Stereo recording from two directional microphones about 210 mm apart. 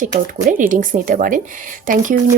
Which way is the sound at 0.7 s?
40° right (ahead or behind).